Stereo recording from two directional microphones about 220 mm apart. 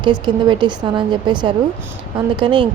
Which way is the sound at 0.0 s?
20° right (ahead or behind).